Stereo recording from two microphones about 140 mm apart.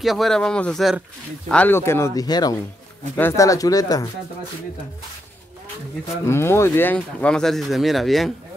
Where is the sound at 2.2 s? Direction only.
30° left (ahead or behind).